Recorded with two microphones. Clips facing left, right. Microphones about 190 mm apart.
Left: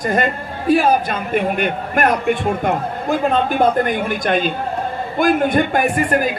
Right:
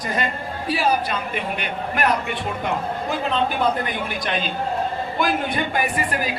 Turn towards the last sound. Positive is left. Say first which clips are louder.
# left 7 dB
turn(degrees=50)  # may be behind; listen again after turning